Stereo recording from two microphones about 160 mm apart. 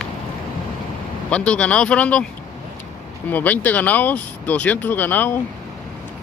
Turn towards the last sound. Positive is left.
turn(degrees=10)  # may be behind; listen again after turning